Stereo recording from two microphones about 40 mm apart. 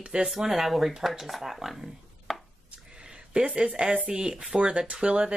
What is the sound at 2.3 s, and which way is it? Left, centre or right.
Chopping, centre.